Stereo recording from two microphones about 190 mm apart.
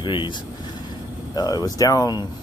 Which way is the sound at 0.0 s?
25° left (ahead or behind).